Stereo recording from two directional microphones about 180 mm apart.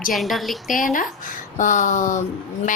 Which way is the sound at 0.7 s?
50° left (ahead or behind).